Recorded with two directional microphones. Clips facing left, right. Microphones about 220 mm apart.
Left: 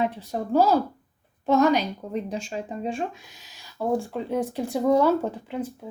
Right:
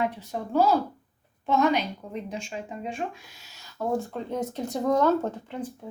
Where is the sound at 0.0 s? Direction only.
35° left (ahead or behind).